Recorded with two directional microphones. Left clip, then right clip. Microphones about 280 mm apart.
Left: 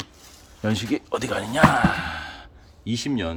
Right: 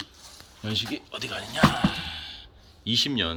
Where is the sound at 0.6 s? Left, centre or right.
Centre.